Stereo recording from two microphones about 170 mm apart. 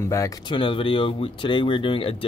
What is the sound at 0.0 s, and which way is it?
Speech, 20° left (ahead or behind).